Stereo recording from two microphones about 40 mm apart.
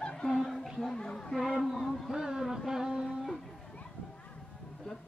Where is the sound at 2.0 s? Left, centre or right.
Centre.